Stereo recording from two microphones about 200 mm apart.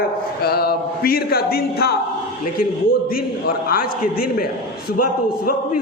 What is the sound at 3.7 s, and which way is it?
Speech, 45° left (ahead or behind).